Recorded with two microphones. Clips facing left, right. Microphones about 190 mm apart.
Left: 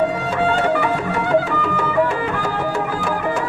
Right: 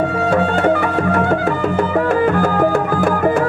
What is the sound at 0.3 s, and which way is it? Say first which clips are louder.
Music: right 4 dB; 45° right (ahead or behind).